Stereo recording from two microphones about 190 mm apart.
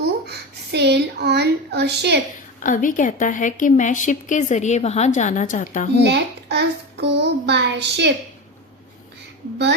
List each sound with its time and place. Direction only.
0.0 s a sound: 60° right (ahead or behind)
2.6 s a woman's voice: 45° left (ahead or behind)
6.0 s a child's voice: 65° right (ahead or behind)